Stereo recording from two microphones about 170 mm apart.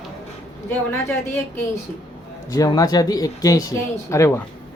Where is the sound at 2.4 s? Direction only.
20° left (ahead or behind).